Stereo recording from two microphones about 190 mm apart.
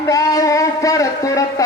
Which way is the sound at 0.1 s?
20° left (ahead or behind).